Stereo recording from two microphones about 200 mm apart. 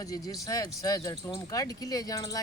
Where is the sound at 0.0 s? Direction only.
15° left (ahead or behind).